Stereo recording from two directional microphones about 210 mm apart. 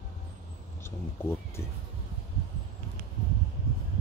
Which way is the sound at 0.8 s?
10° left (ahead or behind).